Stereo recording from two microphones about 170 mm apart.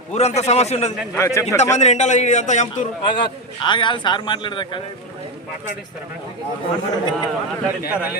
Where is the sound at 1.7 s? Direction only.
45° left (ahead or behind).